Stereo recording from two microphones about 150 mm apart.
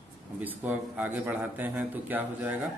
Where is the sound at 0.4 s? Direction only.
10° right (ahead or behind).